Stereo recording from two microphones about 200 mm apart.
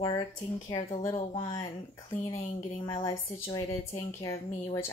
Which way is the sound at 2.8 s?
20° left (ahead or behind).